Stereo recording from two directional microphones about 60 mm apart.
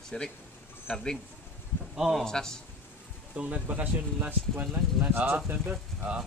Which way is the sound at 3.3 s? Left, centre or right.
Right.